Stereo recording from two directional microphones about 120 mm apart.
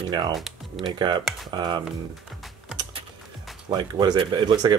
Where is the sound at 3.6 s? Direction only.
35° right (ahead or behind).